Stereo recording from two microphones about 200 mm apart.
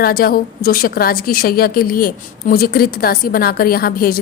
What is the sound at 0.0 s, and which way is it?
A woman's voice, 50° left (ahead or behind).